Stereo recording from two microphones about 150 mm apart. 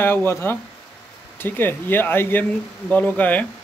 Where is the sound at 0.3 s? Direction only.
15° left (ahead or behind).